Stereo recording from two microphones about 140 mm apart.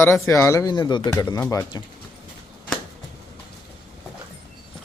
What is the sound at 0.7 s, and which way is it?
Speech, 35° left (ahead or behind).